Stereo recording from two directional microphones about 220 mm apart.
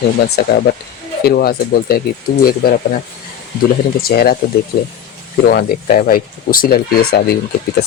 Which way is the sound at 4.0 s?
45° left (ahead or behind).